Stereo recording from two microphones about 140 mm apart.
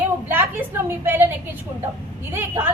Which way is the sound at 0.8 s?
15° right (ahead or behind).